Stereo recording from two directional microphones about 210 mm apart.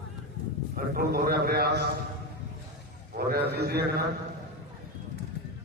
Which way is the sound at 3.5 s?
50° right (ahead or behind).